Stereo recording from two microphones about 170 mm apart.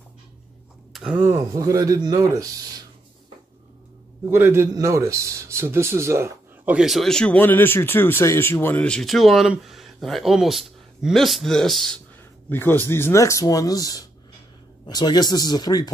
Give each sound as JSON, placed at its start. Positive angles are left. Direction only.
{"t": 0.9, "sound": "speech", "side_deg": -10}
{"t": 4.3, "sound": "a man's voice", "side_deg": -15}